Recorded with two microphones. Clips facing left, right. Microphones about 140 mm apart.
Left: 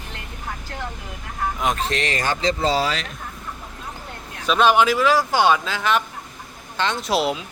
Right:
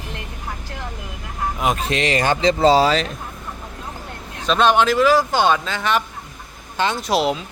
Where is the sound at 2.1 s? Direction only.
25° right (ahead or behind).